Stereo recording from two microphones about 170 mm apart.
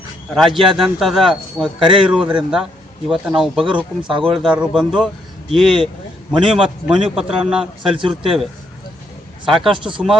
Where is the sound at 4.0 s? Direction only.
30° right (ahead or behind).